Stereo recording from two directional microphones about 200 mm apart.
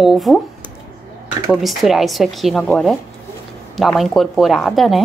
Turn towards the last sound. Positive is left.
turn(degrees=0)  # may be behind; listen again after turning